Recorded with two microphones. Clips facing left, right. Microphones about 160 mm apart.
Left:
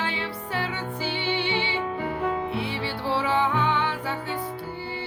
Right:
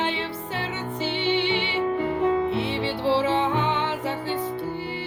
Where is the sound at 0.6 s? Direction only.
20° right (ahead or behind).